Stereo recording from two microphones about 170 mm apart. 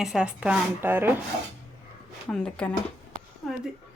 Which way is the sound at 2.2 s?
5° left (ahead or behind).